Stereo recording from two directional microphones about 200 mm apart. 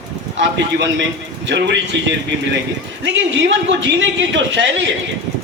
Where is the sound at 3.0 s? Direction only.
65° right (ahead or behind).